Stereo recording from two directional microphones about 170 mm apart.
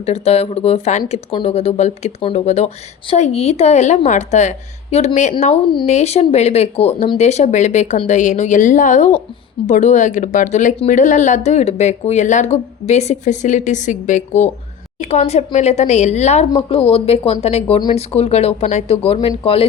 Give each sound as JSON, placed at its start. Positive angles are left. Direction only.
{"t": 0.0, "sound": "speech", "side_deg": 40}